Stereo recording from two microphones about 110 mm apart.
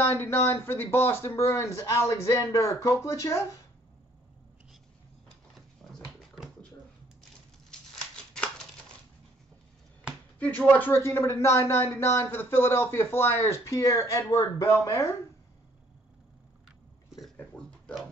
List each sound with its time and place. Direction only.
0.0 s speech: 20° left (ahead or behind)
5.8 s dog: 5° left (ahead or behind)
10.4 s speech: 15° left (ahead or behind)